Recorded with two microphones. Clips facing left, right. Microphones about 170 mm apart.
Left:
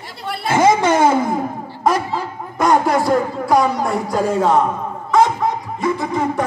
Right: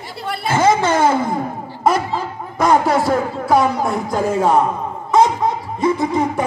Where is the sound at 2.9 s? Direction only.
5° right (ahead or behind).